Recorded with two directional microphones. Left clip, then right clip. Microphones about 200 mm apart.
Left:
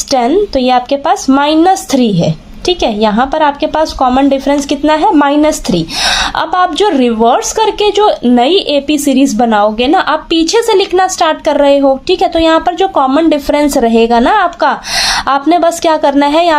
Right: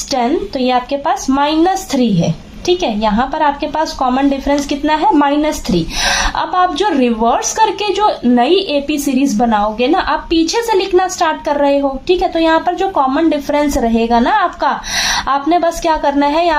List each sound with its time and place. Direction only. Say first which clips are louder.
0.1 s speech: left 6 dB; 45° left (ahead or behind)